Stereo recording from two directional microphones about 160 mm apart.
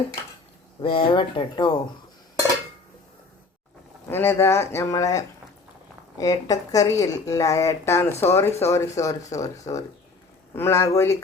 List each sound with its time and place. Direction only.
0.8 s speech: 35° left (ahead or behind)
4.1 s a woman's voice: 15° left (ahead or behind)